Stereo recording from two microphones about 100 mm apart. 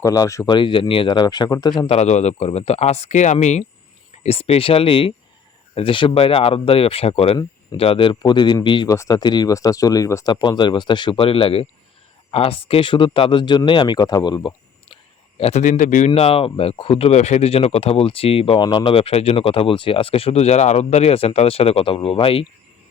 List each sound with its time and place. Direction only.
0.0 s speech: 35° left (ahead or behind)
0.4 s speech: 50° left (ahead or behind)
1.9 s speech: 90° left
4.3 s speech: 80° left
8.1 s speech: 50° left (ahead or behind)
8.9 s speech: 35° left (ahead or behind)
10.2 s speech: 45° left (ahead or behind)
15.4 s speech: 90° left; by 18.6 s 70° left (ahead or behind)
18.6 s speech: 50° left (ahead or behind)